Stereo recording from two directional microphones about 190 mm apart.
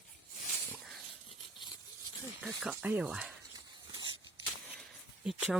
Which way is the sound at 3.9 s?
25° right (ahead or behind).